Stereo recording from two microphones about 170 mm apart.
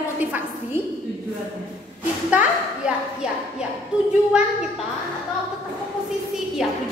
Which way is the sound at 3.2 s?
5° right (ahead or behind).